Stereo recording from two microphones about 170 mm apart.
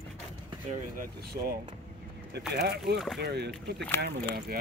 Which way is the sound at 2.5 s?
75° right (ahead or behind).